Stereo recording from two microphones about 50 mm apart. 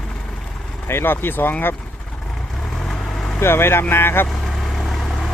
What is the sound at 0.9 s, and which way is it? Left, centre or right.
Speech, left.